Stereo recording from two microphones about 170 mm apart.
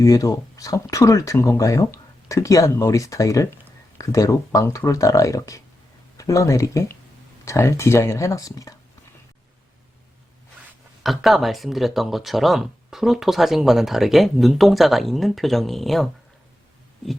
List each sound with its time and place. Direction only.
0.0 s speech: 20° left (ahead or behind)
11.0 s speech: centre (ahead or behind)